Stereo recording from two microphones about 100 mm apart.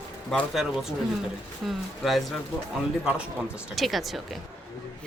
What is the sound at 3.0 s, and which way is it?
Speech, 10° right (ahead or behind).